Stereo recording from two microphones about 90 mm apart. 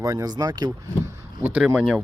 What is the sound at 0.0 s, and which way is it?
Speech, 40° right (ahead or behind).